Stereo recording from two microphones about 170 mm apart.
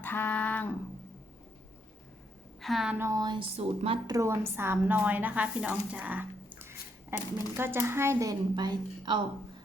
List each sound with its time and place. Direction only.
0.0 s a sound: 10° left (ahead or behind)
2.6 s a woman's voice: centre (ahead or behind)
3.0 s speech: 20° right (ahead or behind)
4.1 s a woman's voice: 15° right (ahead or behind)